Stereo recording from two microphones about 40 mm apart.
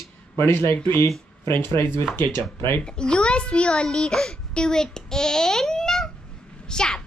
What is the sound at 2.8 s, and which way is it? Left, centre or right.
A child's voice, left.